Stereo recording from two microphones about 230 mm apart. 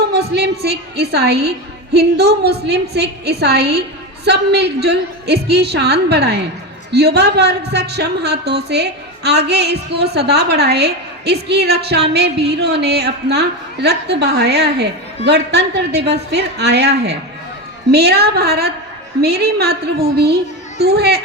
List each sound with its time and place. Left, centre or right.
0.1 s speech: right